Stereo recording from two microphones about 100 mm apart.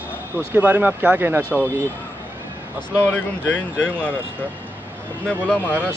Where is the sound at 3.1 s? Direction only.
10° left (ahead or behind).